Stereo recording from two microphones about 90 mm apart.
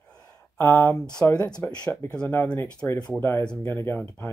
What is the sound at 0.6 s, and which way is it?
Speech, 25° left (ahead or behind).